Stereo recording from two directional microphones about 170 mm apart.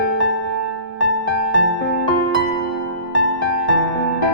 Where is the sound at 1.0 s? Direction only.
90° right.